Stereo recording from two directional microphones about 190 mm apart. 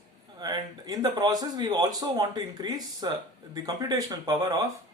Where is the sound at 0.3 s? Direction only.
20° right (ahead or behind).